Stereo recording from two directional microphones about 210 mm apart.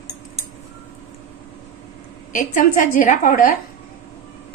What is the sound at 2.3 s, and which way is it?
A woman's voice, 40° left (ahead or behind).